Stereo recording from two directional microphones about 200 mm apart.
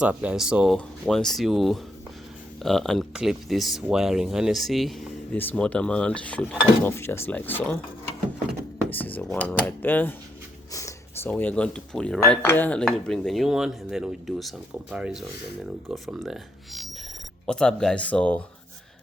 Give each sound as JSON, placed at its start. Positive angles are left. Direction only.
{"t": 0.0, "sound": "speech", "side_deg": -5}
{"t": 8.8, "sound": "speech", "side_deg": 10}